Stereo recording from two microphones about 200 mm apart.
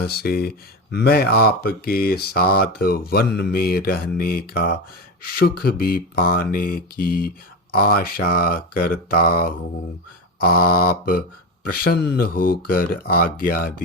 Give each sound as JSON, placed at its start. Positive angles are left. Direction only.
{"t": 0.0, "sound": "speech", "side_deg": 50}